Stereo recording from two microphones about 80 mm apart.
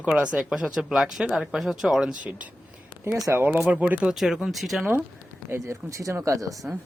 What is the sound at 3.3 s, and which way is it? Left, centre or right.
Speech, right.